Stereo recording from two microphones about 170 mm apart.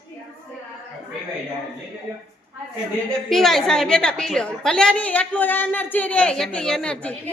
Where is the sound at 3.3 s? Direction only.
Centre (ahead or behind).